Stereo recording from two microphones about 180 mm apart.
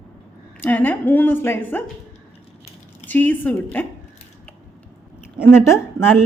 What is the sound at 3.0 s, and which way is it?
Speech, 10° left (ahead or behind).